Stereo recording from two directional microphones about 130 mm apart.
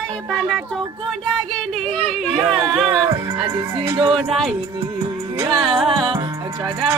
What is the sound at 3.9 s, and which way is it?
Speech, 40° right (ahead or behind).